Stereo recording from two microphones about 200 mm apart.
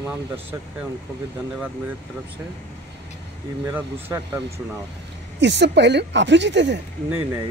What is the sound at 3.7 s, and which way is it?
Speech, 10° right (ahead or behind).